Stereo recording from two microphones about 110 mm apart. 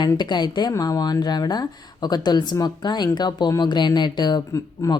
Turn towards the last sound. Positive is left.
turn(degrees=35)  # may be behind; listen again after turning